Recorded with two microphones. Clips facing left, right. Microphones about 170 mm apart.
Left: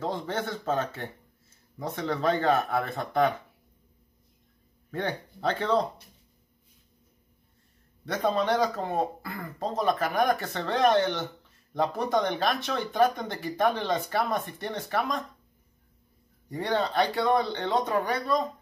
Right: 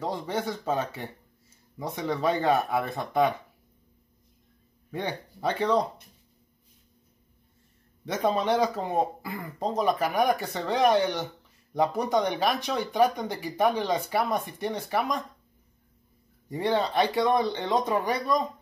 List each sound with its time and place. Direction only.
0.0 s speech: 10° right (ahead or behind)
4.9 s speech: 15° right (ahead or behind)
8.0 s speech: 15° right (ahead or behind)
16.4 s speech: 15° right (ahead or behind)